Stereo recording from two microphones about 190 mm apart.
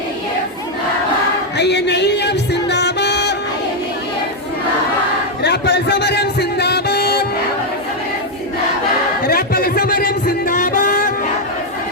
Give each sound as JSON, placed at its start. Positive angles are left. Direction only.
{"t": 1.5, "sound": "music", "side_deg": 60}
{"t": 5.4, "sound": "music", "side_deg": 65}
{"t": 9.2, "sound": "music", "side_deg": 55}